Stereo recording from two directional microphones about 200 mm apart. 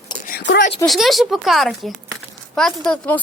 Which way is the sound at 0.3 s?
50° left (ahead or behind).